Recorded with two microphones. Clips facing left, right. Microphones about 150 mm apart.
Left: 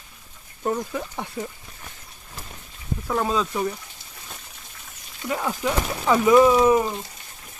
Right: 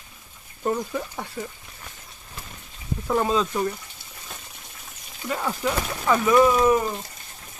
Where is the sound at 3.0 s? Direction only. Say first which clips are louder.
Right 2 dB; 5° right (ahead or behind).